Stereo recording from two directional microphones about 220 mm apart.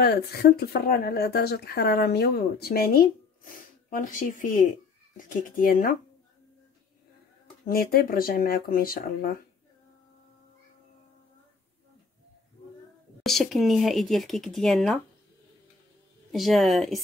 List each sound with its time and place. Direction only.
0.0 s speech: 45° left (ahead or behind)
7.6 s speech: 45° left (ahead or behind)
13.2 s speech: centre (ahead or behind)
16.3 s speech: centre (ahead or behind)